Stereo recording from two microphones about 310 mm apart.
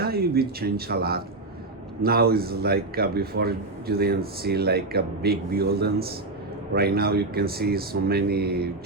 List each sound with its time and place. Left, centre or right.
0.0 s a man's voice: right